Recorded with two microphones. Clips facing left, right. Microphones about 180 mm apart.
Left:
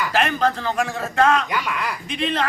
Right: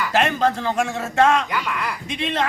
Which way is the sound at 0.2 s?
20° right (ahead or behind).